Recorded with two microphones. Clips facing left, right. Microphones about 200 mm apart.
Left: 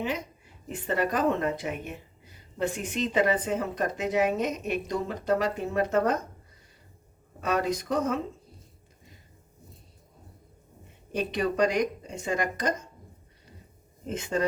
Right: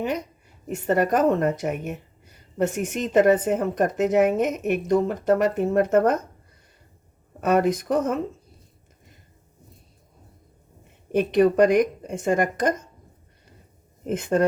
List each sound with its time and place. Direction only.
0.7 s speech: 45° right (ahead or behind)
7.4 s speech: 55° right (ahead or behind)
11.1 s speech: 55° right (ahead or behind)
14.1 s speech: 55° right (ahead or behind)